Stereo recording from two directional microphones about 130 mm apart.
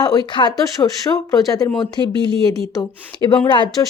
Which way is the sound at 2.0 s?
35° right (ahead or behind).